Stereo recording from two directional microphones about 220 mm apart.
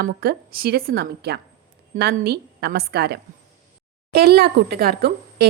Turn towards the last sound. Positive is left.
turn(degrees=-45)  # may be behind; listen again after turning